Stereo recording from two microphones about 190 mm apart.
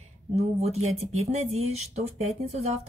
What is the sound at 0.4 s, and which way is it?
Speech, 35° right (ahead or behind).